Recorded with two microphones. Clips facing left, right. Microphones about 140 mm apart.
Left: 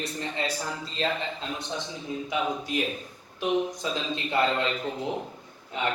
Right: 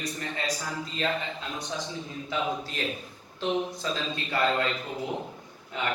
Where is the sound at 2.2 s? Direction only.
15° left (ahead or behind).